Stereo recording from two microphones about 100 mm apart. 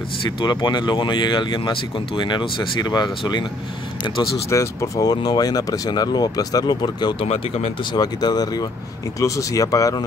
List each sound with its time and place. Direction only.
0.4 s speech: 45° left (ahead or behind)
4.5 s speech: 35° left (ahead or behind)